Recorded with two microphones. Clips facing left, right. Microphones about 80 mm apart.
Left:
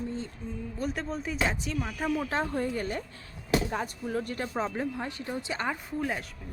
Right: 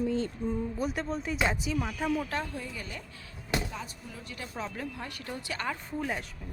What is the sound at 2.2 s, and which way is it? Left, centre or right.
Speech, left.